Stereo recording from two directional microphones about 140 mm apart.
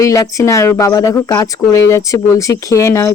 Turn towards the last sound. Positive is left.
turn(degrees=20)  # may be behind; listen again after turning